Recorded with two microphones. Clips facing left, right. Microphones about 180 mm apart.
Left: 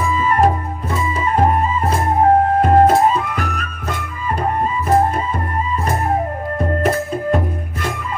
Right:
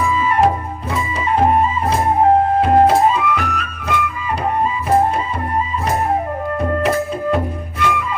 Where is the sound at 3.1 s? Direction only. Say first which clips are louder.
Right 2 dB; 45° left (ahead or behind).